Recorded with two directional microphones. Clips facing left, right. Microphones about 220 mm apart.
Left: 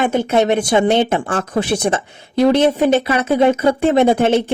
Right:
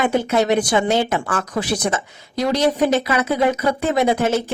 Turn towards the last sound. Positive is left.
turn(degrees=25)  # may be behind; listen again after turning